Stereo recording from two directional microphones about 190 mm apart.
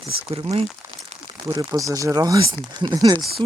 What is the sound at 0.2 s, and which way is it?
Speech, 30° right (ahead or behind).